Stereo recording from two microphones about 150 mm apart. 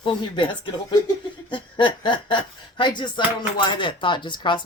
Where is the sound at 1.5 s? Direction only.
30° left (ahead or behind).